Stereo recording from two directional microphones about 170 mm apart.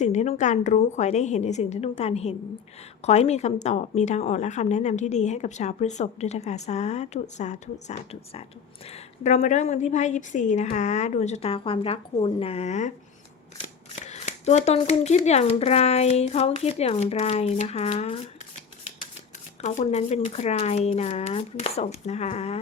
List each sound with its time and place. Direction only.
0.0 s a woman's voice: 45° left (ahead or behind)
13.9 s a woman's voice: 45° left (ahead or behind)
19.6 s a woman's voice: 40° left (ahead or behind)